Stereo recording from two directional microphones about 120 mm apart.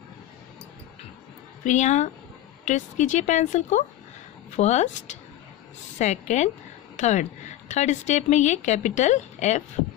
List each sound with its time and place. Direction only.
1.6 s a woman's voice: 85° left
2.6 s a woman's voice: 90° left
4.6 s a woman's voice: 70° left (ahead or behind)